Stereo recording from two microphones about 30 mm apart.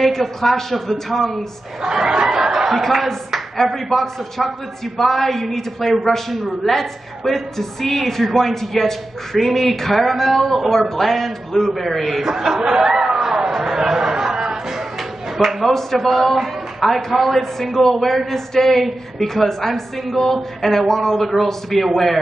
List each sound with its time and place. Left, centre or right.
0.0 s a woman's voice: centre
1.8 s speech: centre
2.2 s a sound: centre
2.7 s a man's voice: centre
12.6 s speech: centre
13.2 s chatter: centre
15.6 s a man's voice: centre